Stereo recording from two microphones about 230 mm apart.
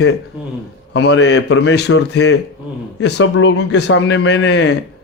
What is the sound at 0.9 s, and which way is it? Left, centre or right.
Speech, left.